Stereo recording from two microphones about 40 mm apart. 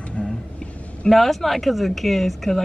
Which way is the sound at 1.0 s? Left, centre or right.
Centre.